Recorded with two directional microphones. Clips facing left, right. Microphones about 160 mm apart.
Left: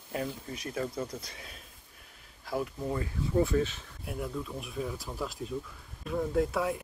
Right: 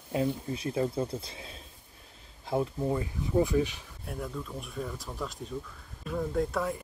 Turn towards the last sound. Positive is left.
turn(degrees=5)  # may be behind; listen again after turning